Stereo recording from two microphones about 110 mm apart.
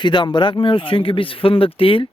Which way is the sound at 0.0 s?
45° left (ahead or behind).